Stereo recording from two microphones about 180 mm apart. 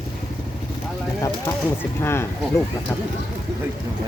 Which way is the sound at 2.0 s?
15° left (ahead or behind).